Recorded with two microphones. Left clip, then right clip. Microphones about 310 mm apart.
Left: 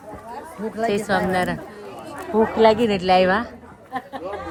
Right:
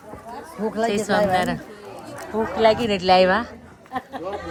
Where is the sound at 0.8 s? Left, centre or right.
Centre.